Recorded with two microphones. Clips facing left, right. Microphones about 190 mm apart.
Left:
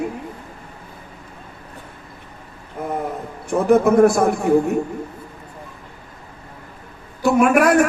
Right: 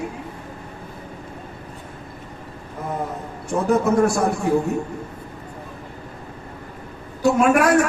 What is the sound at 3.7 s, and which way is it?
Speech, 60° left (ahead or behind).